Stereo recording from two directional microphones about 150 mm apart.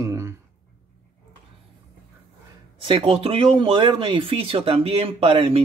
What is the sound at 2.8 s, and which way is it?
Speech, 35° right (ahead or behind).